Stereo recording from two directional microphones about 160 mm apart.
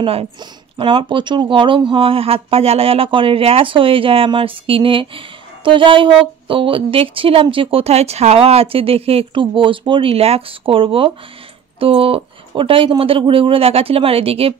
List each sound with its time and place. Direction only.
0.0 s speech: 35° right (ahead or behind)